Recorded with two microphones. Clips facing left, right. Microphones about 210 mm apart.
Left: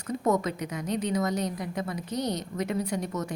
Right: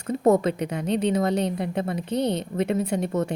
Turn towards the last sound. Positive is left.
turn(degrees=-25)  # may be behind; listen again after turning